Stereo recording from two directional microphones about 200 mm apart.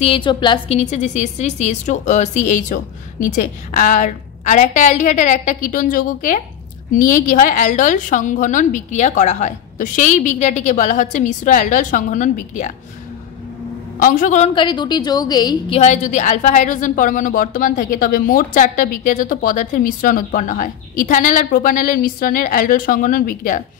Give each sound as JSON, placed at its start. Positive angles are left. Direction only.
{"t": 0.0, "sound": "speech", "side_deg": 25}
{"t": 14.0, "sound": "speech", "side_deg": 40}
{"t": 14.5, "sound": "a woman's voice", "side_deg": 25}
{"t": 15.8, "sound": "speech", "side_deg": 35}